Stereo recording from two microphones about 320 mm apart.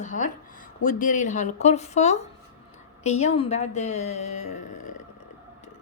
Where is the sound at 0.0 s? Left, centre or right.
Left.